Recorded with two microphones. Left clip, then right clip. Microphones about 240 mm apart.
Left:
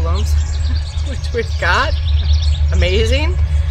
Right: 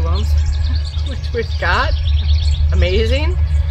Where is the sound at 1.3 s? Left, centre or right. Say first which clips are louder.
Left 2 dB; centre.